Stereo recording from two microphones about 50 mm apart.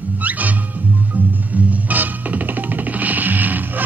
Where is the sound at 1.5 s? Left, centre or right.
Right.